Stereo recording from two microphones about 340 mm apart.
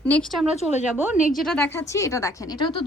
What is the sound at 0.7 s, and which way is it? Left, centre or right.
Speech, centre.